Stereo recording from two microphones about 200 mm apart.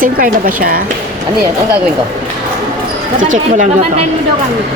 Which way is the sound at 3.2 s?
40° right (ahead or behind).